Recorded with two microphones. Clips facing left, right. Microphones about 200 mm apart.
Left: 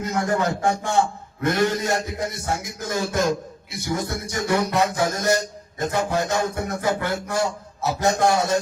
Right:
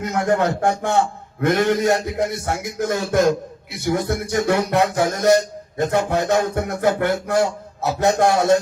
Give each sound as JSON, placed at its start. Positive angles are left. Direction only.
{"t": 0.0, "sound": "speech", "side_deg": -60}